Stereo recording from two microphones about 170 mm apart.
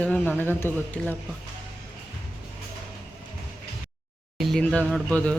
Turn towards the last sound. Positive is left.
turn(degrees=10)  # may be behind; listen again after turning